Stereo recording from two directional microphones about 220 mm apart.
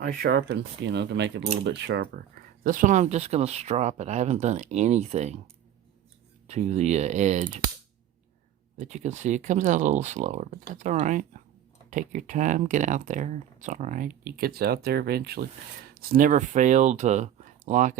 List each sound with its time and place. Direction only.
0.0 s speech: 45° right (ahead or behind)
2.6 s speech: 35° right (ahead or behind)
6.5 s speech: 30° right (ahead or behind)
8.8 s speech: 30° right (ahead or behind)